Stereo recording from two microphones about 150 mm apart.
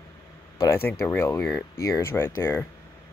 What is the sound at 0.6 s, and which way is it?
Speech, 15° left (ahead or behind).